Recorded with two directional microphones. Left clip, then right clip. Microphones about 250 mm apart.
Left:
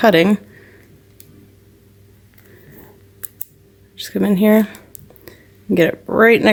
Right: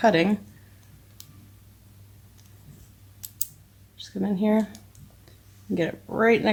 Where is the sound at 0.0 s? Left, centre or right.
Left.